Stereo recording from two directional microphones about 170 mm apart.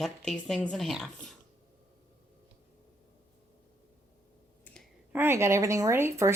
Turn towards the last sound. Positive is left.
turn(degrees=-15)  # may be behind; listen again after turning